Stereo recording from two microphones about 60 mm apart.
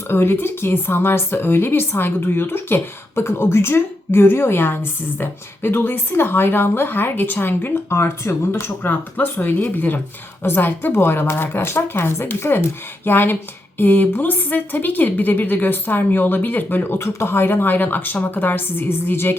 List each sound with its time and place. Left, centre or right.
0.1 s speech: left